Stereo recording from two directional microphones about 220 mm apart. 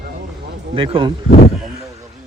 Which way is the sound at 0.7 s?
25° right (ahead or behind).